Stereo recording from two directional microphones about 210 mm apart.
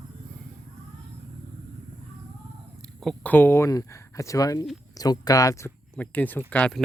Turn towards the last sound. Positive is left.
turn(degrees=5)  # may be behind; listen again after turning